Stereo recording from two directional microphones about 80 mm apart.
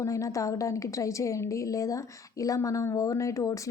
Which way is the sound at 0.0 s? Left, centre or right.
Left.